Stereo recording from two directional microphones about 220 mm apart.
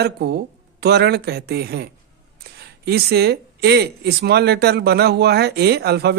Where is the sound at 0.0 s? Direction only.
45° right (ahead or behind).